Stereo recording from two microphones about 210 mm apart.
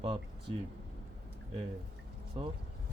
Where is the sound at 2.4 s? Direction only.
25° right (ahead or behind).